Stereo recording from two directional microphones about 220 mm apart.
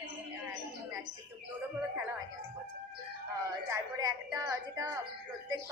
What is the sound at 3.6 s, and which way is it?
Speech, 15° right (ahead or behind).